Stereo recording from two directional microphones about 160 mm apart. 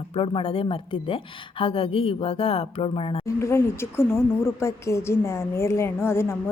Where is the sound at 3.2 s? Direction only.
15° left (ahead or behind).